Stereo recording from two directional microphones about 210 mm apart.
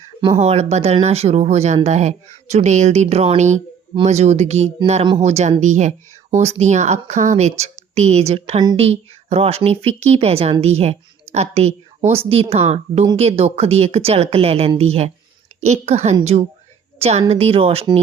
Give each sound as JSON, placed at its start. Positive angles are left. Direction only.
{"t": 0.3, "sound": "speech", "side_deg": -30}